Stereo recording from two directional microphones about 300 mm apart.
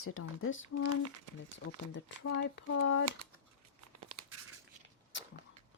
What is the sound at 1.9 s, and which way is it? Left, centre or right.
Speech, left.